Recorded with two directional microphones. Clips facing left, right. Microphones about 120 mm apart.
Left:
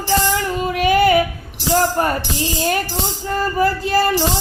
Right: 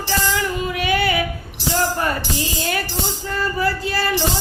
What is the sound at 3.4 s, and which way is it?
Speech, 45° left (ahead or behind).